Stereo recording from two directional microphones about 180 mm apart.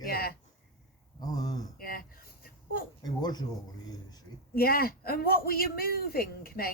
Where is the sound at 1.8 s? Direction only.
55° left (ahead or behind).